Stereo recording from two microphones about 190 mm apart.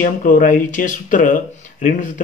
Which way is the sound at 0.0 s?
45° left (ahead or behind).